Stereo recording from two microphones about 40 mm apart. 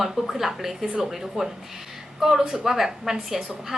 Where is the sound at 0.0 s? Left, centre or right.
Centre.